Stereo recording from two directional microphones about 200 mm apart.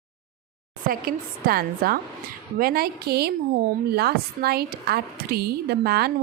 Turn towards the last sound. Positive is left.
turn(degrees=-50)  # may be behind; listen again after turning